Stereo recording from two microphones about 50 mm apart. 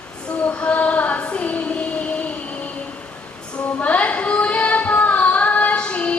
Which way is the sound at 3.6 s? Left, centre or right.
Left.